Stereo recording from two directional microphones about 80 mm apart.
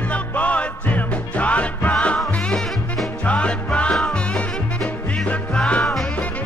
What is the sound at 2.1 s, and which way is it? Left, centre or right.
Music, centre.